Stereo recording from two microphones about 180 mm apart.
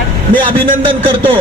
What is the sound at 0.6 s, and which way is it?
Speech, 30° right (ahead or behind).